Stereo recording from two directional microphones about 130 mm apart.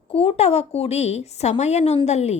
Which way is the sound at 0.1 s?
45° left (ahead or behind).